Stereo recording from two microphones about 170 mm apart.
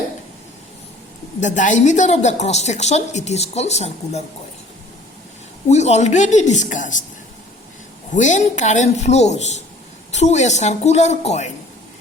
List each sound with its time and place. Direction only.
1.4 s a woman's voice: 45° left (ahead or behind)
5.6 s a woman's voice: 40° left (ahead or behind)
8.1 s a woman's voice: 45° left (ahead or behind)